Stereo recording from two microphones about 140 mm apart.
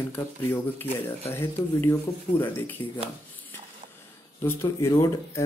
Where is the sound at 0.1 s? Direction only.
15° left (ahead or behind).